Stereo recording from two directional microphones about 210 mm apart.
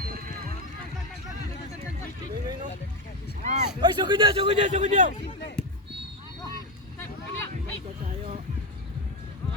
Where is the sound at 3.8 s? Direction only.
20° right (ahead or behind).